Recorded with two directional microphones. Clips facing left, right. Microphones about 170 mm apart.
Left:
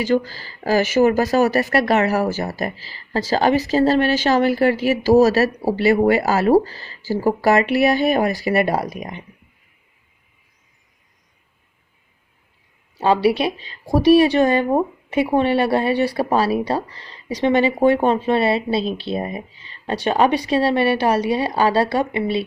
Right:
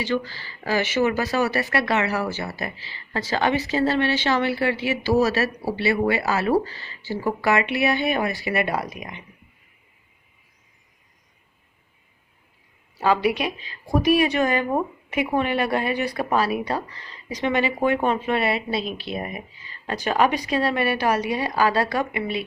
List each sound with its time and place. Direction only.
0.0 s a woman's voice: 40° left (ahead or behind)
13.0 s a woman's voice: 30° left (ahead or behind)